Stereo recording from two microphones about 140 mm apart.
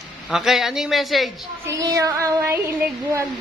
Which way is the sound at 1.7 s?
25° right (ahead or behind).